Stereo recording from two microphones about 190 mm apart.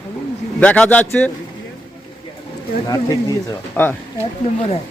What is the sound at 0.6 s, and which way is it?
Speech, 5° left (ahead or behind).